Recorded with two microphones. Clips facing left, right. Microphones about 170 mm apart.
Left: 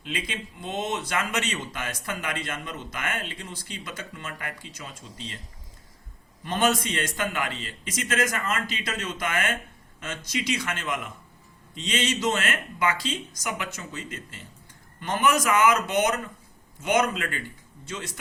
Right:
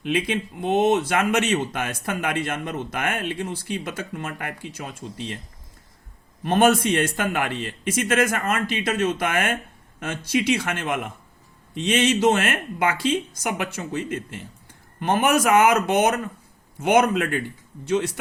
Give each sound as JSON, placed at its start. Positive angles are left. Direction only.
{"t": 0.0, "sound": "speech", "side_deg": -60}
{"t": 6.4, "sound": "speech", "side_deg": -60}